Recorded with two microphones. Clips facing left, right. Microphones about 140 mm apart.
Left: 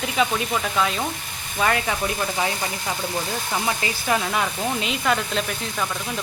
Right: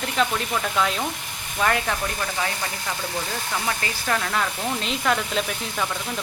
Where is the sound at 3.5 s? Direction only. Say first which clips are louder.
Left 3 dB; 20° left (ahead or behind); by 5.9 s centre (ahead or behind).